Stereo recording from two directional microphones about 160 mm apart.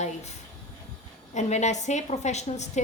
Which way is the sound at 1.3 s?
45° left (ahead or behind).